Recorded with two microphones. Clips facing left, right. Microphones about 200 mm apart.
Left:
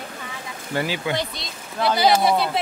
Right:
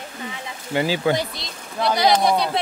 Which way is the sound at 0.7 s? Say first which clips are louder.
Right 3 dB; 20° right (ahead or behind).